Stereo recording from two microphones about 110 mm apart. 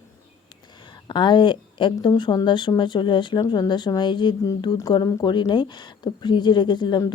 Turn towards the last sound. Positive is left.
turn(degrees=40)  # may be behind; listen again after turning